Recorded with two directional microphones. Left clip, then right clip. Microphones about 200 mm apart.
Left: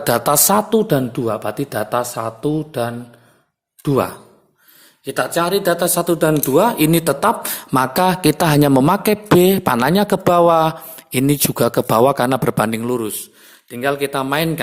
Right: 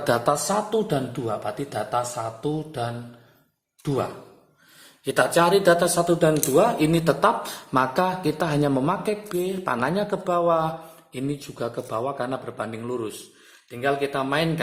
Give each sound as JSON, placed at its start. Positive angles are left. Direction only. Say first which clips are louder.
{"t": 0.0, "sound": "speech", "louder": "left 5 dB", "side_deg": 35}
{"t": 0.4, "sound": "speech", "louder": "left 8 dB", "side_deg": 55}
{"t": 5.0, "sound": "speech", "louder": "left 1 dB", "side_deg": 15}